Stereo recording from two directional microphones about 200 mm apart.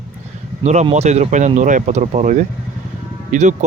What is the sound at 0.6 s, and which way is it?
Speech, 35° right (ahead or behind).